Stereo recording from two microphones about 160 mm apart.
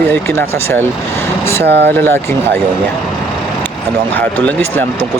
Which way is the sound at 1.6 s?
90° right.